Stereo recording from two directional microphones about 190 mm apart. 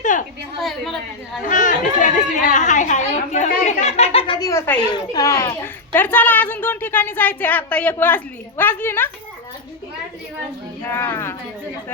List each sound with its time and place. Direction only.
0.0 s a sound: 40° left (ahead or behind)
0.6 s a woman's voice: centre (ahead or behind)
1.5 s a woman's voice: 40° left (ahead or behind); by 9.0 s 10° left (ahead or behind)
10.8 s a child's voice: 10° left (ahead or behind)